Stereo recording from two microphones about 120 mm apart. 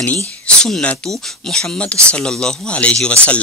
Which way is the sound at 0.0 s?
15° left (ahead or behind).